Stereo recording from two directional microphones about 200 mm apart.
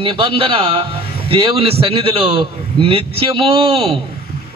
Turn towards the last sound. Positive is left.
turn(degrees=-30)  # may be behind; listen again after turning